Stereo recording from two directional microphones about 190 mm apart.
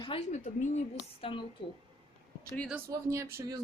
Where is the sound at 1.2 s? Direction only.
30° left (ahead or behind).